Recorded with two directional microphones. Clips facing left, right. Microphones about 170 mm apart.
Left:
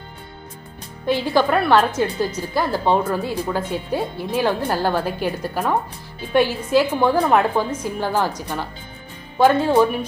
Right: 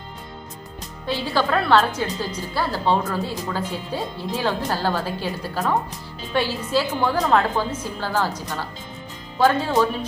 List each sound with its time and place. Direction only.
1.0 s speech: 15° left (ahead or behind)